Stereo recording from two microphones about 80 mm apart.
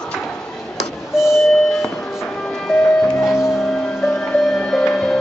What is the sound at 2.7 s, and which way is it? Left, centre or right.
Music, centre.